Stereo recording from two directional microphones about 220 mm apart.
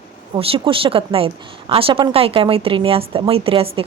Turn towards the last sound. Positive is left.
turn(degrees=-25)  # may be behind; listen again after turning